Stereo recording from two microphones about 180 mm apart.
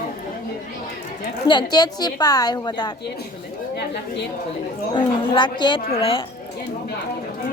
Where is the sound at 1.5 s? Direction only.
25° left (ahead or behind).